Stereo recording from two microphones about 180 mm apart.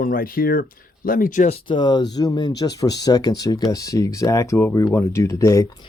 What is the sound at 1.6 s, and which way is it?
Speech, 25° left (ahead or behind).